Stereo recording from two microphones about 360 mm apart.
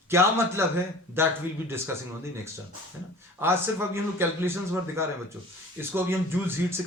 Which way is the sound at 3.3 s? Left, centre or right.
Centre.